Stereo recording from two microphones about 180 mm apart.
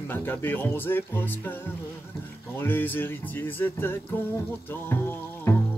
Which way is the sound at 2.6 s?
10° left (ahead or behind).